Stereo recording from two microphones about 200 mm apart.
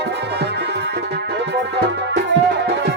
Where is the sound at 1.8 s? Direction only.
55° right (ahead or behind).